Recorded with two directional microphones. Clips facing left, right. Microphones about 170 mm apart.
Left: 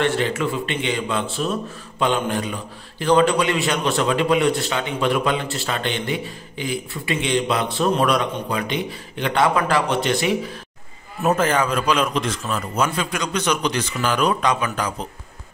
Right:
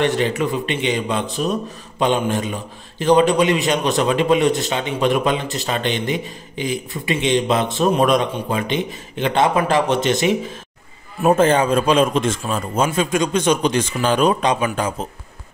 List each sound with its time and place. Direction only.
0.0 s a man's voice: 15° right (ahead or behind)